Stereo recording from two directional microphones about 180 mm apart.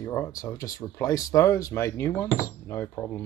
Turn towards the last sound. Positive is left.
turn(degrees=15)  # may be behind; listen again after turning